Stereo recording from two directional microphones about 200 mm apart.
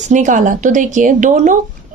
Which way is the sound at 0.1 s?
40° right (ahead or behind).